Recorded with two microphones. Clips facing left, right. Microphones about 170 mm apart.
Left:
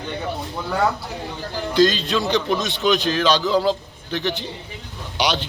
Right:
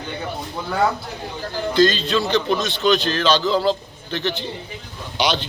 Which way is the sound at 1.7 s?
15° left (ahead or behind).